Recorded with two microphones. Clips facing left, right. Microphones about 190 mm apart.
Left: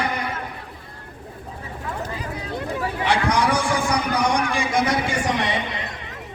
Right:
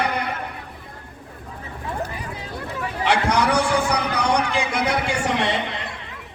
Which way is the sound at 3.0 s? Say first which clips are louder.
Right 1 dB; 65° right (ahead or behind).